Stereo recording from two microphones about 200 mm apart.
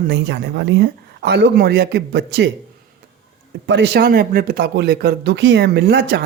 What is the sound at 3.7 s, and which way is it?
Speech, 55° right (ahead or behind).